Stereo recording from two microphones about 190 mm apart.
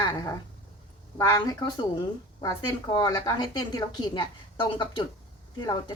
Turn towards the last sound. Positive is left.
turn(degrees=20)  # may be behind; listen again after turning